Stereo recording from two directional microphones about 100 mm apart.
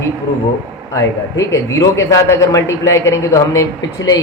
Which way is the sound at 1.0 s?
30° left (ahead or behind).